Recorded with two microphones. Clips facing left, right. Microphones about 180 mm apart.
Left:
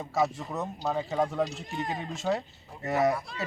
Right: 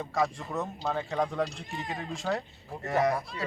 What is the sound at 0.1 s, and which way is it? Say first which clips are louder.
Speech: left 2 dB; centre (ahead or behind).